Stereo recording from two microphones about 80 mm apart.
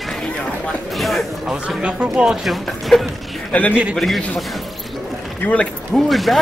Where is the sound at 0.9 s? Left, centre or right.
Centre.